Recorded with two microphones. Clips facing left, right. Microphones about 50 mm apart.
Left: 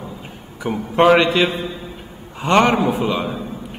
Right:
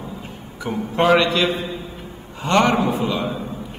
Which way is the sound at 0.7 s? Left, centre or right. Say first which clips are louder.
Left 3 dB; centre.